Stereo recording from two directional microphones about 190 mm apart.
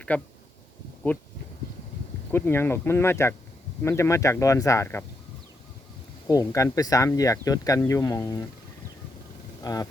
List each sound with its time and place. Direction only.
0.1 s speech: 5° left (ahead or behind)
2.3 s speech: 10° left (ahead or behind)
6.2 s speech: 20° left (ahead or behind)
9.6 s speech: 20° left (ahead or behind)